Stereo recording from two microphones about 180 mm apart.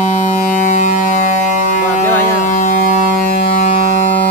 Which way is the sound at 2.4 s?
45° left (ahead or behind).